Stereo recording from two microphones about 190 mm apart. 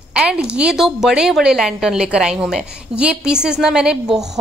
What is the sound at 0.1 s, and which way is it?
A woman's voice, 5° right (ahead or behind).